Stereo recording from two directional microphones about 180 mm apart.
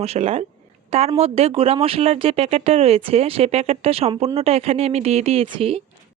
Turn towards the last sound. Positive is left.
turn(degrees=-30)  # may be behind; listen again after turning